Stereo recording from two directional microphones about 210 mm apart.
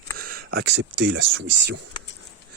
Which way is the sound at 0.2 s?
45° right (ahead or behind).